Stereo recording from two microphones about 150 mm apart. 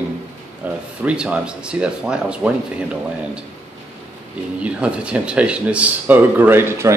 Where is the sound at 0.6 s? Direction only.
10° right (ahead or behind).